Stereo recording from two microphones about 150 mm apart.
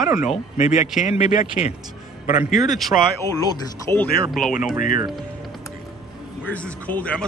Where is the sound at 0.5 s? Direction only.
50° left (ahead or behind).